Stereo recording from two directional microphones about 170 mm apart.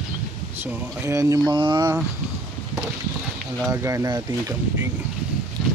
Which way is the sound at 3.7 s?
20° right (ahead or behind).